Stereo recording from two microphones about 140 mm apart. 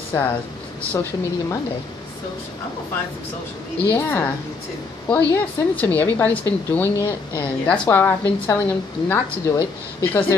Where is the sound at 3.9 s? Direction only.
15° left (ahead or behind).